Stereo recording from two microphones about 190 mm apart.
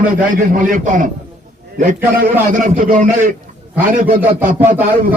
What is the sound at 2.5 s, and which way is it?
A man's voice, 45° right (ahead or behind).